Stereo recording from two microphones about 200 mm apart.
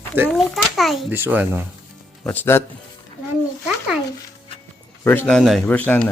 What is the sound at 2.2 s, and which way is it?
Speech, 10° left (ahead or behind).